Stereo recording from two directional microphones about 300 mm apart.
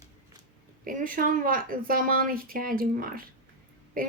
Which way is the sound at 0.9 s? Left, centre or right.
Right.